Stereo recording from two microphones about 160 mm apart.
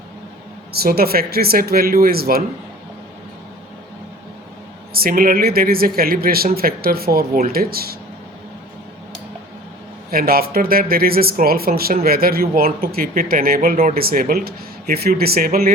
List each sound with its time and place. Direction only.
0.7 s speech: 75° right (ahead or behind)
4.9 s speech: 65° right (ahead or behind)
10.1 s speech: 70° right (ahead or behind)